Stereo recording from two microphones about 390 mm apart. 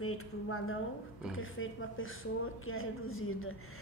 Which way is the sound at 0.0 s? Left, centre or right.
Left.